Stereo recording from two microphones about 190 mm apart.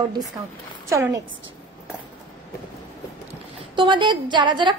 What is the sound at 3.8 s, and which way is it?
Speech, 25° right (ahead or behind).